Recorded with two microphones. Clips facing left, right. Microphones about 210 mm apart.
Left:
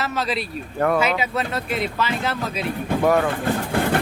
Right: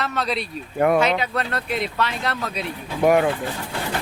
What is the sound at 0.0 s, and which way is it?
Speech, centre (ahead or behind).